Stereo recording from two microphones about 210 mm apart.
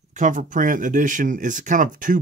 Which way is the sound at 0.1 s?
35° right (ahead or behind).